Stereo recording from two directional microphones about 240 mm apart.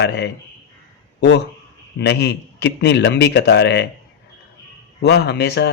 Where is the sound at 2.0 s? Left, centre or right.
Left.